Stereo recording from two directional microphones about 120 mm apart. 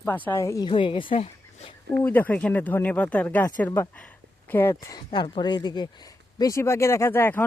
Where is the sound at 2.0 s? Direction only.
15° left (ahead or behind).